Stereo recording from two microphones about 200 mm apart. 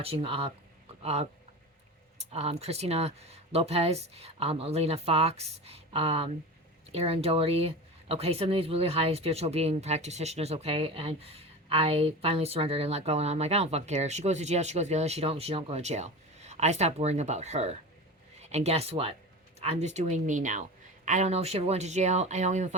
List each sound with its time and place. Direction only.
0.0 s speech: 30° right (ahead or behind)
2.3 s speech: 30° right (ahead or behind)